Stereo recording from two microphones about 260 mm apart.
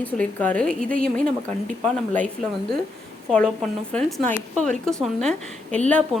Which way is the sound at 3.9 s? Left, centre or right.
Centre.